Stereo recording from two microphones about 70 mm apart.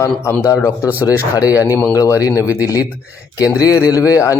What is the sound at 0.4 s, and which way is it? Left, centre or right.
Speech, left.